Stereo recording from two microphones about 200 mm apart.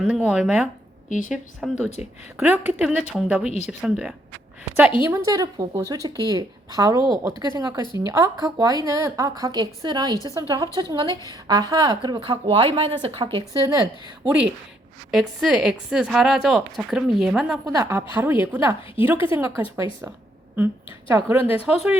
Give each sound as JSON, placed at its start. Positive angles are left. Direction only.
{"t": 0.0, "sound": "a woman's voice", "side_deg": -5}
{"t": 5.1, "sound": "a woman's voice", "side_deg": -15}
{"t": 14.3, "sound": "a woman's voice", "side_deg": -5}
{"t": 17.7, "sound": "a woman's voice", "side_deg": -15}